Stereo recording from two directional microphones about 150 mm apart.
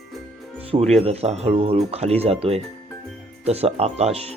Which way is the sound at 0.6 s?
40° right (ahead or behind).